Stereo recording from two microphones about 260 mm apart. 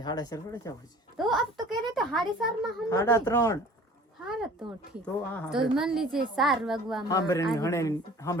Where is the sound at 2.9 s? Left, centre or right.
Centre.